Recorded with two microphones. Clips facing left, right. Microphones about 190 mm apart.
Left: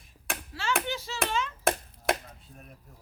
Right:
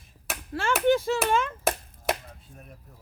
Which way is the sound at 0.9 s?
50° right (ahead or behind).